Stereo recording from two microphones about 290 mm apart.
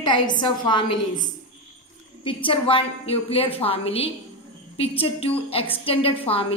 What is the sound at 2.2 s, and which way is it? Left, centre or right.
A woman's voice, centre.